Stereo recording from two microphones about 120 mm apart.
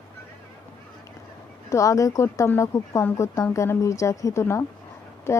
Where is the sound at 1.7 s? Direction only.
30° left (ahead or behind).